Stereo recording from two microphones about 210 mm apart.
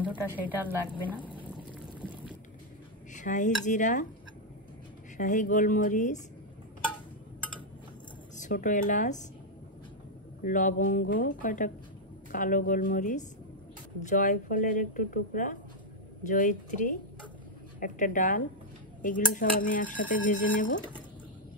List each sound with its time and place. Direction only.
0.0 s a woman's voice: 5° right (ahead or behind)
1.7 s pour: 5° right (ahead or behind)
3.1 s dishes: 35° left (ahead or behind)
5.1 s speech: 40° left (ahead or behind)
8.4 s speech: 40° left (ahead or behind)
10.4 s speech: 40° left (ahead or behind)